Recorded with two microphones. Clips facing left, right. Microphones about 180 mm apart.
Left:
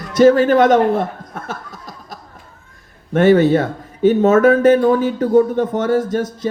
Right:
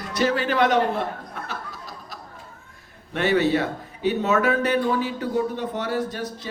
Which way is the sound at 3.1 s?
45° left (ahead or behind).